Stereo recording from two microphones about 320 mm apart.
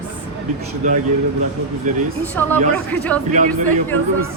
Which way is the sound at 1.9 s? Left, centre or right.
Right.